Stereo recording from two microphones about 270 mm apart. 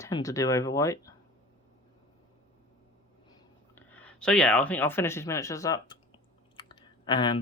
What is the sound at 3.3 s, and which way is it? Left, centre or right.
Speech, centre.